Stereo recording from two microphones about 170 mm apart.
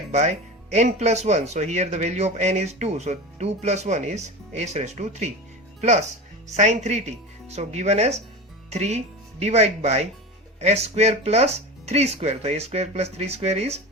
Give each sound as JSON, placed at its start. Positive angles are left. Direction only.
{"t": 0.1, "sound": "speech", "side_deg": -40}